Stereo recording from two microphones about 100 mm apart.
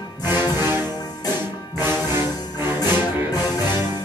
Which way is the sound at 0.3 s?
25° right (ahead or behind).